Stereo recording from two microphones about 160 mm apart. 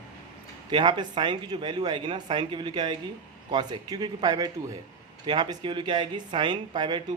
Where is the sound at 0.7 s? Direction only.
30° right (ahead or behind).